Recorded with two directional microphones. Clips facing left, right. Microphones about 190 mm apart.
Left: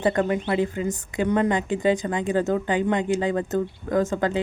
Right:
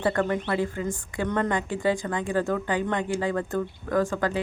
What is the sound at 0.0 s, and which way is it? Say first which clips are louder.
A woman's voice: left 3 dB; 20° left (ahead or behind).